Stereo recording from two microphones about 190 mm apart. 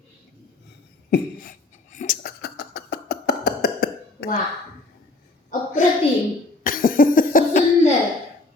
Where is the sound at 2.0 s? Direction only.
45° left (ahead or behind).